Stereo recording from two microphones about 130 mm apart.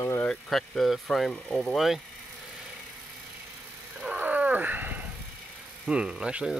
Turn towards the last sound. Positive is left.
turn(degrees=-5)  # may be behind; listen again after turning